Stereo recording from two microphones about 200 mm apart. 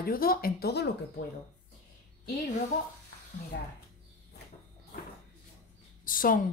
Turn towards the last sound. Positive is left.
turn(degrees=45)  # may be behind; listen again after turning